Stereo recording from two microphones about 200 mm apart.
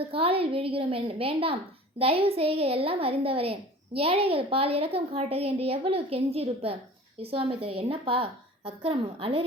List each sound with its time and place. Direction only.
0.1 s a child's voice: 30° right (ahead or behind)